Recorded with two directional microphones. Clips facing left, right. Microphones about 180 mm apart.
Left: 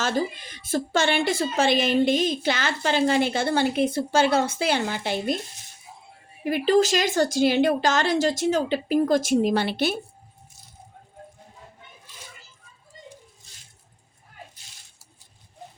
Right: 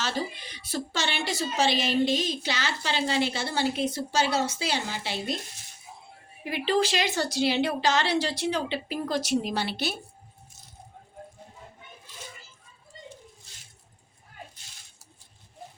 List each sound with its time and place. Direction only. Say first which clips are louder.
0.0 s a woman's voice: left 6 dB; 50° left (ahead or behind)
6.4 s a woman's voice: left 6 dB; 45° left (ahead or behind)